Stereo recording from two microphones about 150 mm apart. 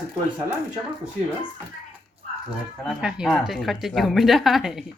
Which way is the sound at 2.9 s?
5° right (ahead or behind).